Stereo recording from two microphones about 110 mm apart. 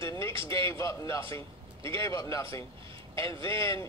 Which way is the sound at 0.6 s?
25° left (ahead or behind).